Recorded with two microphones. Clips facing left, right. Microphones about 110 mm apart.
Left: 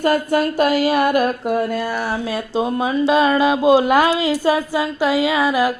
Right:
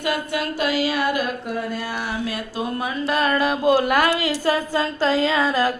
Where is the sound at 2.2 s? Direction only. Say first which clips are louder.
Left 6 dB; 25° left (ahead or behind).